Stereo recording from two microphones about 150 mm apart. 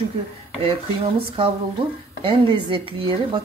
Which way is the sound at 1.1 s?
35° right (ahead or behind).